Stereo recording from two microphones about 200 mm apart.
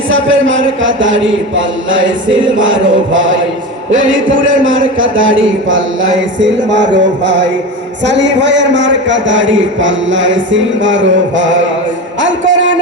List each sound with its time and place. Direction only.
0.1 s a man's voice: 75° right (ahead or behind)
6.4 s music: 65° right (ahead or behind)
8.0 s a man's voice: 65° right (ahead or behind)
12.2 s music: 70° right (ahead or behind)